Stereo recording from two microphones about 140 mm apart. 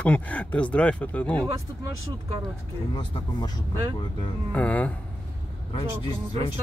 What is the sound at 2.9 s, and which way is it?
Speech, 30° left (ahead or behind).